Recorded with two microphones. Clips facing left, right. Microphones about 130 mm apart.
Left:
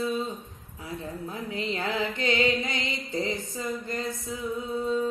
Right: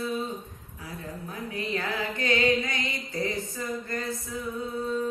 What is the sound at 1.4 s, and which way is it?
Mantra, 25° left (ahead or behind).